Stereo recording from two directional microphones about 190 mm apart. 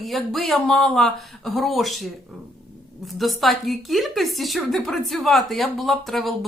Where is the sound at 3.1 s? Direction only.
Centre (ahead or behind).